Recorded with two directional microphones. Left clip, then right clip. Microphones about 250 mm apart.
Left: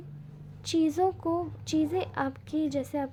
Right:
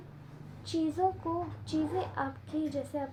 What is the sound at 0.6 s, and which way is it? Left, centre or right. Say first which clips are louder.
A woman's voice: left 4 dB; left.